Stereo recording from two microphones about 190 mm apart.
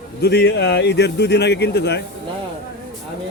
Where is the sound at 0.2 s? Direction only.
60° left (ahead or behind).